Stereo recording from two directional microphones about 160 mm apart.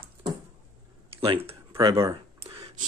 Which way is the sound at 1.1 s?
35° right (ahead or behind).